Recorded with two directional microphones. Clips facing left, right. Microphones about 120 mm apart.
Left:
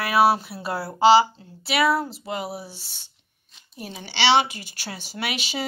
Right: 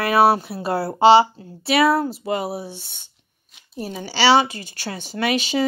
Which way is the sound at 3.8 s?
40° right (ahead or behind).